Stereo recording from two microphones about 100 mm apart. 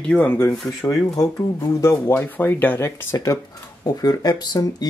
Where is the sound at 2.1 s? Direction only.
20° left (ahead or behind).